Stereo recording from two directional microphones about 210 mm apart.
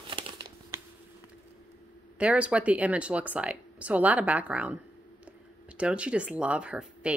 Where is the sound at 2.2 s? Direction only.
5° right (ahead or behind).